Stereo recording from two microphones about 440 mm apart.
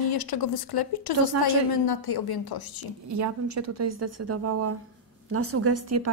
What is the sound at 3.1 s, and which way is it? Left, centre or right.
A woman's voice, right.